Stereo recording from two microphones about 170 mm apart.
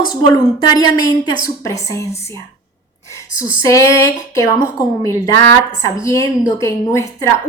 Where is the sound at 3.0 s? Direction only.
15° left (ahead or behind).